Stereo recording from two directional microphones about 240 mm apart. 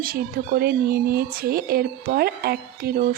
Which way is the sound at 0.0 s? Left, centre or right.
Right.